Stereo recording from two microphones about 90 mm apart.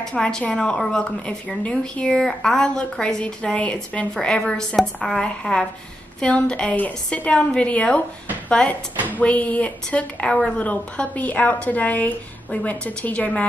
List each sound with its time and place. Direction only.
0.0 s a woman's voice: 10° left (ahead or behind)